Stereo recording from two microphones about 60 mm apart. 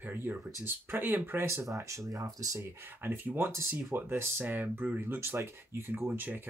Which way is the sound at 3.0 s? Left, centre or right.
Right.